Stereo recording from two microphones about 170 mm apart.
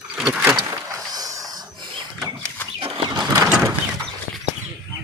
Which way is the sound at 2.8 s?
25° right (ahead or behind).